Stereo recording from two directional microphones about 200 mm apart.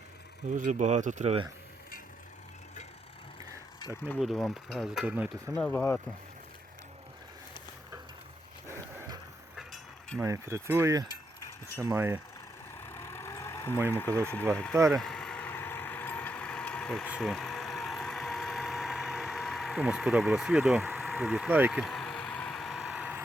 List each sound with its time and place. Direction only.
0.5 s speech: 40° right (ahead or behind)
4.1 s speech: centre (ahead or behind)
5.5 s speech: 5° left (ahead or behind)
8.6 s a sound: 15° right (ahead or behind)
9.6 s a sound: centre (ahead or behind)
10.2 s speech: 15° right (ahead or behind)
12.8 s vehicle: 15° left (ahead or behind)
13.9 s speech: 10° left (ahead or behind)
14.8 s vehicle: centre (ahead or behind)